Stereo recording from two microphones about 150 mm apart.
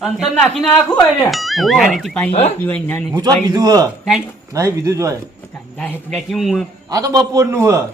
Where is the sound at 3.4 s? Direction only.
25° right (ahead or behind).